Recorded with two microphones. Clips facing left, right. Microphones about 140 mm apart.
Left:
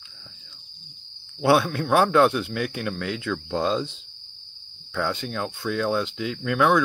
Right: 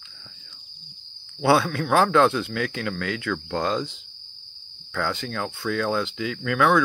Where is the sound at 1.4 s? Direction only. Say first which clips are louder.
Even; 15° left (ahead or behind).